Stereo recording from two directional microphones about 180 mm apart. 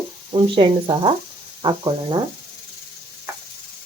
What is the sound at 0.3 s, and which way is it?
Speech, 30° right (ahead or behind).